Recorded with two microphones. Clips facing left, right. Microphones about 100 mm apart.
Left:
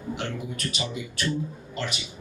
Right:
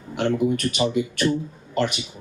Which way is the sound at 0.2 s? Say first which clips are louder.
Right 11 dB; 55° right (ahead or behind).